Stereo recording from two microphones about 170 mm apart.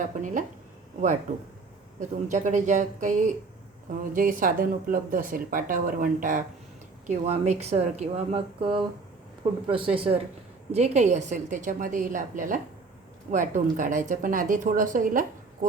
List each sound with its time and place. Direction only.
0.0 s a woman's voice: 50° right (ahead or behind)